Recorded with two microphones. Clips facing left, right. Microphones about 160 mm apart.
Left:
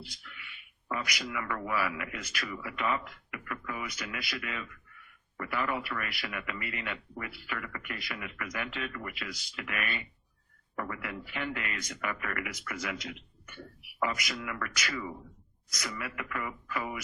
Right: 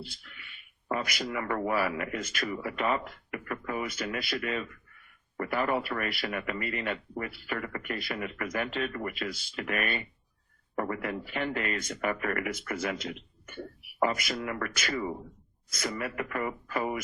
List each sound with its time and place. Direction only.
0.2 s speech: 40° right (ahead or behind)
3.8 s speech: 45° right (ahead or behind)
4.2 s speech: 35° right (ahead or behind)